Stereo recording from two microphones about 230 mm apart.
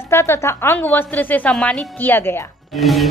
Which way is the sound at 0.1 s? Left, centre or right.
Centre.